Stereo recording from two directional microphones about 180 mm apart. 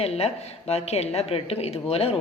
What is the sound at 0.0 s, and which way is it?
Speech, 35° left (ahead or behind).